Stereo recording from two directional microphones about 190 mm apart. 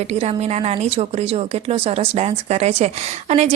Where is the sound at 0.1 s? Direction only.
35° right (ahead or behind).